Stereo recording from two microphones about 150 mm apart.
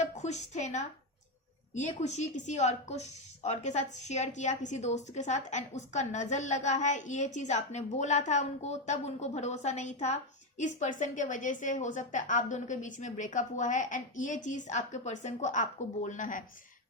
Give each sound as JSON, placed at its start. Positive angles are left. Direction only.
{"t": 0.0, "sound": "a woman's voice", "side_deg": 50}